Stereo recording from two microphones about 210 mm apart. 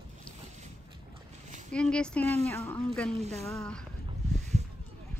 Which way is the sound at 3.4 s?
Centre (ahead or behind).